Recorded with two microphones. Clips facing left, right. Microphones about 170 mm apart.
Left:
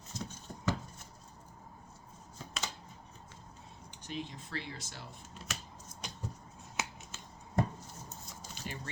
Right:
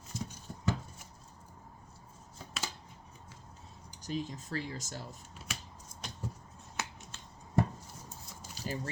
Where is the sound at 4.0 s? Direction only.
40° right (ahead or behind).